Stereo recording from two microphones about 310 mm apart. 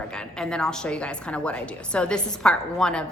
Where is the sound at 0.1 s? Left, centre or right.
Centre.